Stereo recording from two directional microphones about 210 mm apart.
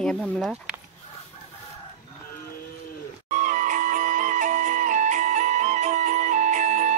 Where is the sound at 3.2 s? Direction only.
35° right (ahead or behind).